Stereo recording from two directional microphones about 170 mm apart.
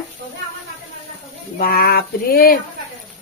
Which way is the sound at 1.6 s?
60° left (ahead or behind).